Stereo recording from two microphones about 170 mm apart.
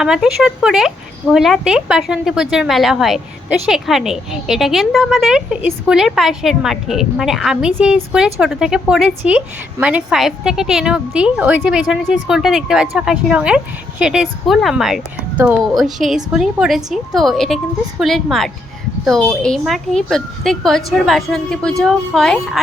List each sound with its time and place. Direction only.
0.0 s speech: 5° right (ahead or behind)